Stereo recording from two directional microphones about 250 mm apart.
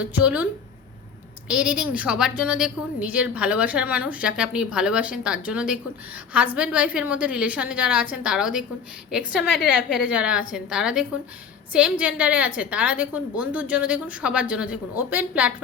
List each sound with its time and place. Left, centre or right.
0.0 s a woman's voice: centre
1.5 s a woman's voice: centre